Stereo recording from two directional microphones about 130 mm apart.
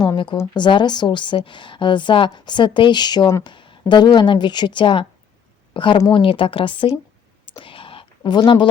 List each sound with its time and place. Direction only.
0.0 s a woman's voice: 35° left (ahead or behind)
3.4 s a woman's voice: 40° left (ahead or behind)
7.4 s a sound: 40° left (ahead or behind)